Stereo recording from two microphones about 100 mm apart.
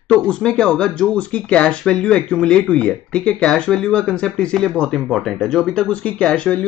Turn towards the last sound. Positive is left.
turn(degrees=10)  # may be behind; listen again after turning